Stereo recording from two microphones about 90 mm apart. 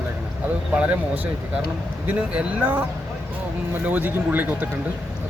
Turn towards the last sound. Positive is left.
turn(degrees=-20)  # may be behind; listen again after turning